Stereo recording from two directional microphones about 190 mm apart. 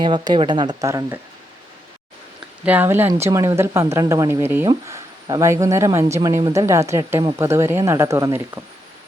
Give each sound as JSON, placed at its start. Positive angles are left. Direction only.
{"t": 0.0, "sound": "speech", "side_deg": -25}
{"t": 2.6, "sound": "speech", "side_deg": -10}